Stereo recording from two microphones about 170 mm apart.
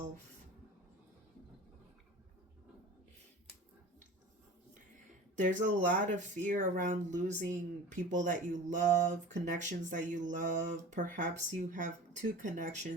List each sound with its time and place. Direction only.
5.4 s speech: 45° right (ahead or behind)